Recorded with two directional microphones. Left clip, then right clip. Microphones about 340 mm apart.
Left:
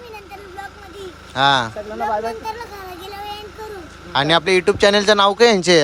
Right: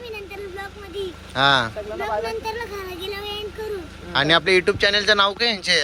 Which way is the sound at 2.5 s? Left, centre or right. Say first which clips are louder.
Even; centre.